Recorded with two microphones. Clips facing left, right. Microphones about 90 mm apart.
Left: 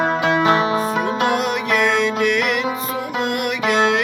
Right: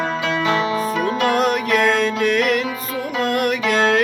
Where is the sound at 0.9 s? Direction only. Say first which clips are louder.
Even; 30° left (ahead or behind).